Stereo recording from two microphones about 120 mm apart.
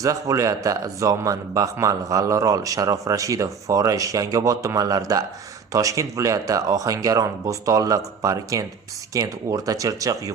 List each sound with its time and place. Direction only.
0.0 s a man's voice: 30° right (ahead or behind)